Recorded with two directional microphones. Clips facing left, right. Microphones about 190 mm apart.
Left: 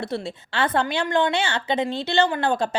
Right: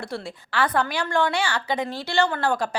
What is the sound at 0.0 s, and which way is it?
A woman's voice, 25° left (ahead or behind).